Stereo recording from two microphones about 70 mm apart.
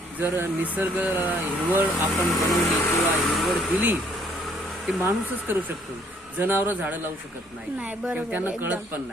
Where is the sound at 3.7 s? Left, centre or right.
Right.